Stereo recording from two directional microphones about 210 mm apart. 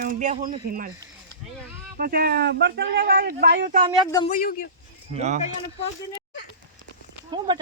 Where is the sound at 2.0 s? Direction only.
45° right (ahead or behind).